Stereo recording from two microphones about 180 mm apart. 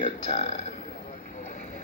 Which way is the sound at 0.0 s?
35° left (ahead or behind).